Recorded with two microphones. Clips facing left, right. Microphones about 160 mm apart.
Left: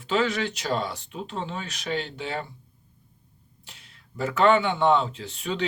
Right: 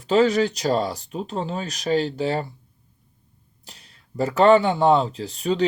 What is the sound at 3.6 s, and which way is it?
Speech, 40° right (ahead or behind).